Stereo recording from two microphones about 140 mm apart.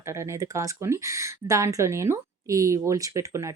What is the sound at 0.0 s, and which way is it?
Speech, 20° right (ahead or behind).